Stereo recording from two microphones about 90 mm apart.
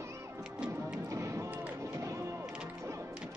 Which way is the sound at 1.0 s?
35° right (ahead or behind).